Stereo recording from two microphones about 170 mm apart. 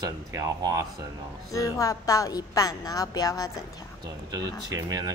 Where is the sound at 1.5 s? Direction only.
20° left (ahead or behind).